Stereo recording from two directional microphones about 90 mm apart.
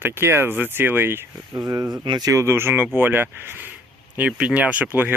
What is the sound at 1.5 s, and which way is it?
Speech, 40° right (ahead or behind).